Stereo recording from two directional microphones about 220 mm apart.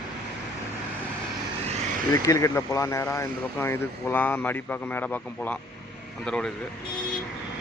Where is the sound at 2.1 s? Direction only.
15° left (ahead or behind).